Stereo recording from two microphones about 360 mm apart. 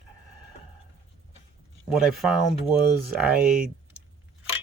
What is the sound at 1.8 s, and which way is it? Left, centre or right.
Speech, centre.